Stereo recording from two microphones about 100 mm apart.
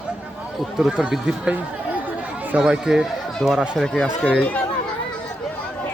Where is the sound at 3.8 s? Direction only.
5° left (ahead or behind).